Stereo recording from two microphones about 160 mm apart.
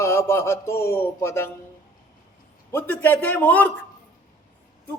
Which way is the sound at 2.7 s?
15° left (ahead or behind).